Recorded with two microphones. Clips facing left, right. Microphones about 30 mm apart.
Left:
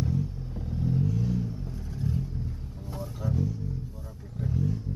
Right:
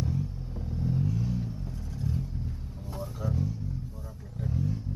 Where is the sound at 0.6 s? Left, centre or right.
Centre.